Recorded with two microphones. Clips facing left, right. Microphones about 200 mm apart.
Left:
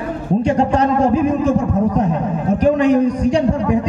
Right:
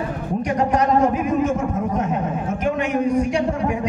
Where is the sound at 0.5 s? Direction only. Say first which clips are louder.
Left 2 dB; 30° left (ahead or behind).